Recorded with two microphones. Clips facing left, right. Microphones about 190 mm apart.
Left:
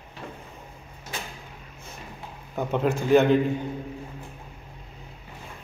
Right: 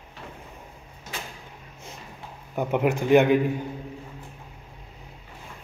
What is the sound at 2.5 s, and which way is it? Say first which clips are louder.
Speech: right 1 dB; 15° right (ahead or behind).